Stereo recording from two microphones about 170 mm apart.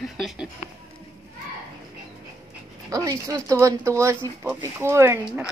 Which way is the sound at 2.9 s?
20° right (ahead or behind).